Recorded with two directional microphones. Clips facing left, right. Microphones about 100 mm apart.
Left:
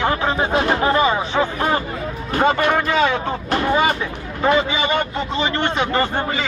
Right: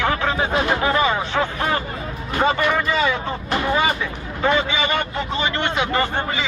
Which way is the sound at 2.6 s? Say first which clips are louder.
Left 3 dB; 50° left (ahead or behind).